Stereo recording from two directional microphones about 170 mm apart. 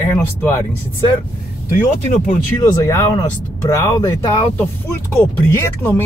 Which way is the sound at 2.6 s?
20° left (ahead or behind).